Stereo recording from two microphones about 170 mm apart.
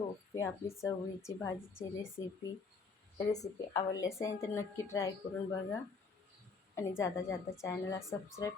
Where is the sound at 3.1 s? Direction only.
40° left (ahead or behind).